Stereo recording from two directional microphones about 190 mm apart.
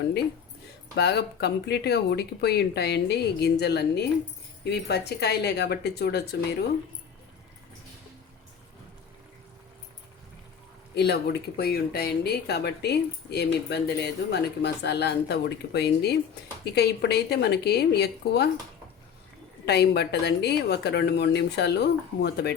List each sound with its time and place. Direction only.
0.9 s speech: 60° left (ahead or behind)
10.9 s speech: 60° left (ahead or behind)
19.6 s speech: 60° left (ahead or behind)